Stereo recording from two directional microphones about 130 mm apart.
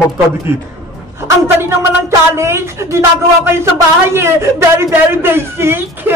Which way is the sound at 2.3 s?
20° right (ahead or behind).